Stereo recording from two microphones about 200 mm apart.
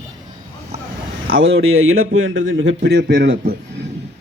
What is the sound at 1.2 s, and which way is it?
Speech, 80° right.